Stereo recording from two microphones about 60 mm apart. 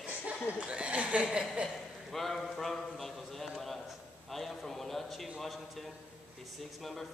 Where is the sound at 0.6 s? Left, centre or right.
Centre.